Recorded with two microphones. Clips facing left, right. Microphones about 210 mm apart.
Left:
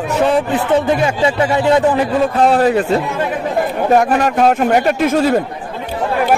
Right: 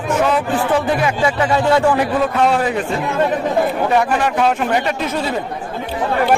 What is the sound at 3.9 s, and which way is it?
A man's voice, 45° left (ahead or behind).